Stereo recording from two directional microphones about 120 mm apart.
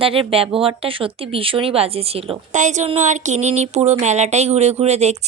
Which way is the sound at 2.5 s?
90° right.